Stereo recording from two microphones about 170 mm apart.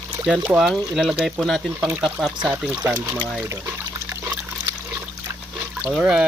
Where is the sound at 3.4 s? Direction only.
15° right (ahead or behind).